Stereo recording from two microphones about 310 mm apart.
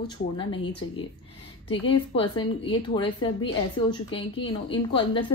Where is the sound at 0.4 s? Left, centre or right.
Centre.